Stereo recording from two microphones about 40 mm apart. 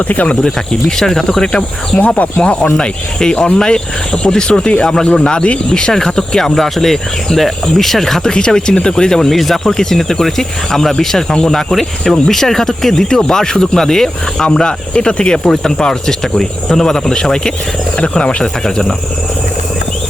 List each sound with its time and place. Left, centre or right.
0.1 s speech: left
0.4 s speech: centre
2.0 s speech: left; by 8.3 s centre
8.3 s speech: centre
9.3 s speech: centre
14.4 s speech: left
15.4 s speech: centre
18.4 s speech: centre